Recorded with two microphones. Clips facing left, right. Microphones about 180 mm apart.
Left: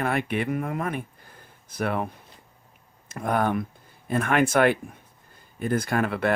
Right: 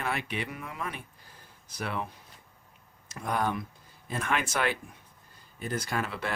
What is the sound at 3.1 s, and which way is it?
Speech, 55° left (ahead or behind).